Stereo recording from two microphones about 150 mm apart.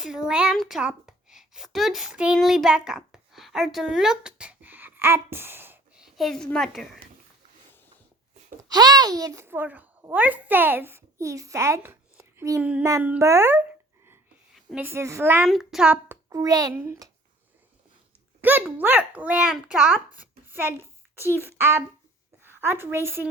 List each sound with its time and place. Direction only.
0.0 s a woman's voice: 5° right (ahead or behind)
8.7 s a woman's voice: 25° right (ahead or behind)
14.8 s a child's voice: 15° right (ahead or behind)
15.4 s a child's voice: centre (ahead or behind)
16.0 s a child's voice: 20° right (ahead or behind)
18.4 s a child's voice: 10° right (ahead or behind)